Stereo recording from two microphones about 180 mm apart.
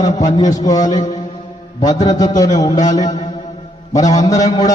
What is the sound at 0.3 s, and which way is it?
Speech, 20° left (ahead or behind).